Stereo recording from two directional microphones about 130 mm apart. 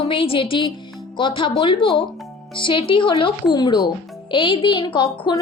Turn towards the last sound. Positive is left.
turn(degrees=35)  # may be behind; listen again after turning